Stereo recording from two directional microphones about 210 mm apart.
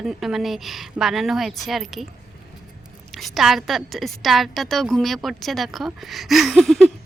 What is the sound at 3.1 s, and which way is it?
A woman's voice, centre (ahead or behind).